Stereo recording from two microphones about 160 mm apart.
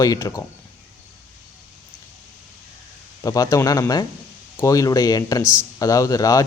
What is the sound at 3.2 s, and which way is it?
Speech, 20° left (ahead or behind).